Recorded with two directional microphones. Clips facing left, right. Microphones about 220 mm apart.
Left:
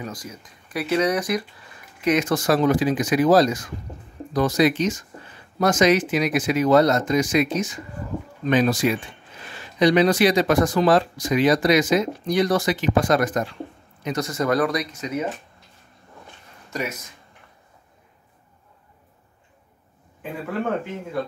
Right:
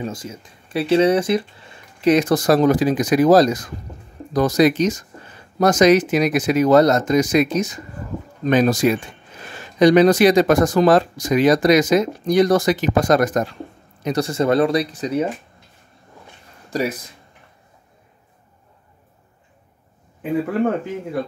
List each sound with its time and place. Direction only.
0.0 s speech: 25° right (ahead or behind); by 13.6 s 45° right (ahead or behind)
14.0 s speech: 35° right (ahead or behind)
16.7 s speech: 35° right (ahead or behind)